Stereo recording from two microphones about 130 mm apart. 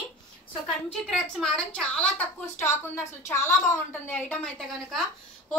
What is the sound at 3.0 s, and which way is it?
Speech, 20° left (ahead or behind).